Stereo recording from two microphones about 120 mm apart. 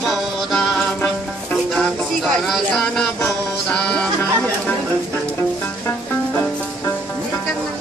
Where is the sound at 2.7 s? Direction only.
10° left (ahead or behind).